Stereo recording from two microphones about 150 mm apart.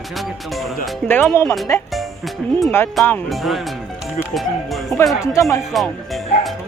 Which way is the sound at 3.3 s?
Centre (ahead or behind).